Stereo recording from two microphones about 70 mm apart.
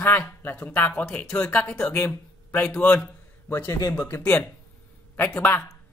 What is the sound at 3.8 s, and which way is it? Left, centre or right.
Speech, left.